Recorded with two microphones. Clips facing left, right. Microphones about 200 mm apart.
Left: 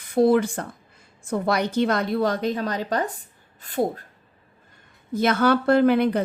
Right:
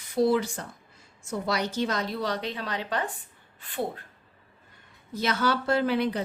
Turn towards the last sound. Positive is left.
turn(degrees=55)  # may be behind; listen again after turning